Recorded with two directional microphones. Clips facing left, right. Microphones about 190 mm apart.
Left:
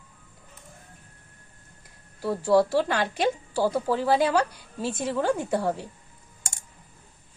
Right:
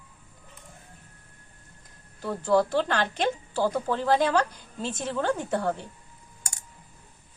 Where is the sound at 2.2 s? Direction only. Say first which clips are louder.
Left 2 dB; 5° left (ahead or behind).